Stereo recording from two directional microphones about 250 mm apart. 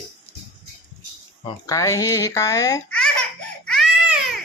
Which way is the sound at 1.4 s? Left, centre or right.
Centre.